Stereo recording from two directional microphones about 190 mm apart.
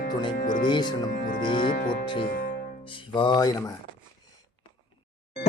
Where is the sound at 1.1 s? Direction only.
45° left (ahead or behind).